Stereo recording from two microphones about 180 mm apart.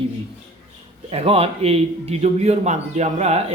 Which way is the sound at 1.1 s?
30° right (ahead or behind).